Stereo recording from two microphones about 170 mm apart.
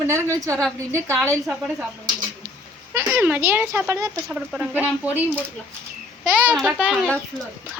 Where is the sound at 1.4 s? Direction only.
Centre (ahead or behind).